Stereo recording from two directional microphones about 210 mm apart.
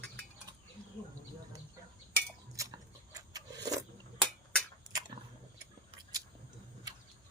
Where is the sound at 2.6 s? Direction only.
15° right (ahead or behind).